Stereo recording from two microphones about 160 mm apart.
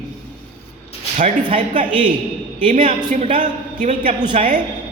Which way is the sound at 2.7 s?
50° right (ahead or behind).